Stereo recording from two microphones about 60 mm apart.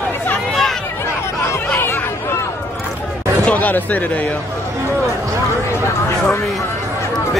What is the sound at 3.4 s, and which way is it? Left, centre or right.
Speech, left.